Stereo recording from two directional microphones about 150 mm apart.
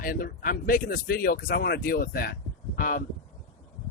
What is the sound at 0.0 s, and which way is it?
Speech, 70° left (ahead or behind).